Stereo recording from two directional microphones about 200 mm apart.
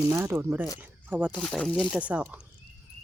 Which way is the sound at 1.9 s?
5° right (ahead or behind).